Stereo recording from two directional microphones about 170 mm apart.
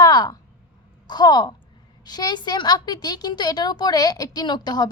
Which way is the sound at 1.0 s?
25° left (ahead or behind).